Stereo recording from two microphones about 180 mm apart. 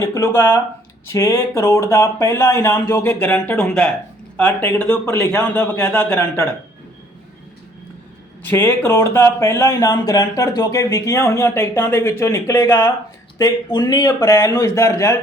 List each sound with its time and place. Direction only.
0.0 s speech: 15° left (ahead or behind)
8.4 s speech: 10° left (ahead or behind)